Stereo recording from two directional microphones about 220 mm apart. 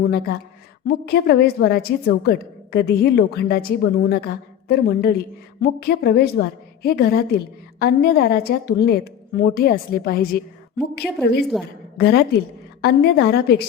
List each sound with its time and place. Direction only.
0.0 s a woman's voice: 45° left (ahead or behind)